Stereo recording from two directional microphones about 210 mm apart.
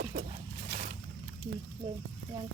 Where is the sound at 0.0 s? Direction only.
45° right (ahead or behind).